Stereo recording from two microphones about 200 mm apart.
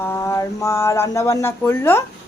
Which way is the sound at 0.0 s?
15° left (ahead or behind).